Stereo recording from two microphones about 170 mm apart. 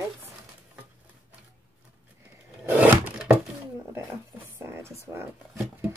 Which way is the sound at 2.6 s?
10° right (ahead or behind).